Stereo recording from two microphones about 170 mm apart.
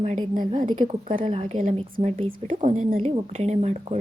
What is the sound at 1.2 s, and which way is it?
Speech, 35° right (ahead or behind).